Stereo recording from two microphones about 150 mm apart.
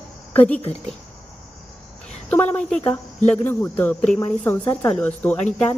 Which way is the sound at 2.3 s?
10° left (ahead or behind).